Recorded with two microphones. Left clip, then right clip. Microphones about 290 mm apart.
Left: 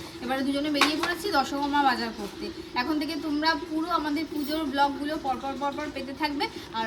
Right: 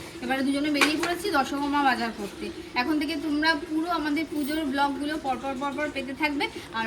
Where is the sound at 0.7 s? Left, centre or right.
Left.